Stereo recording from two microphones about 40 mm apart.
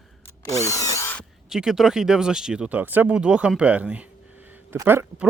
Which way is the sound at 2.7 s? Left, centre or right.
Right.